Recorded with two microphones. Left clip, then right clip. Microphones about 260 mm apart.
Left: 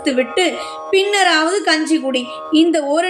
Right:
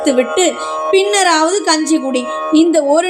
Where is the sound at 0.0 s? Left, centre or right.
Centre.